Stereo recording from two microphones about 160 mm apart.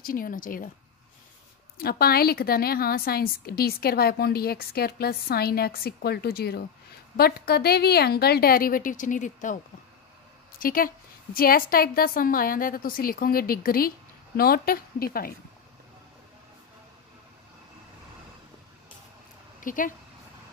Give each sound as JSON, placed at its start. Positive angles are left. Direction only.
{"t": 0.0, "sound": "speech", "side_deg": 60}
{"t": 1.8, "sound": "a woman's voice", "side_deg": 70}
{"t": 10.6, "sound": "a woman's voice", "side_deg": 60}
{"t": 19.6, "sound": "speech", "side_deg": 55}